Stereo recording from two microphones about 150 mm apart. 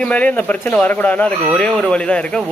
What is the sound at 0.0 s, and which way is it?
Speech, 10° left (ahead or behind).